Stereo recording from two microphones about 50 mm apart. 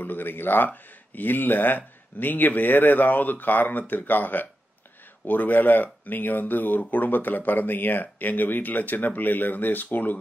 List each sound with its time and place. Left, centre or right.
0.0 s speech: left